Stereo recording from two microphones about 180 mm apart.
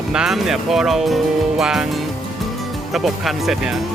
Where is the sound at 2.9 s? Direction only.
Centre (ahead or behind).